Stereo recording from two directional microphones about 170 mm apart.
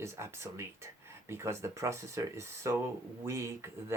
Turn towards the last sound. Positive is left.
turn(degrees=-15)  # may be behind; listen again after turning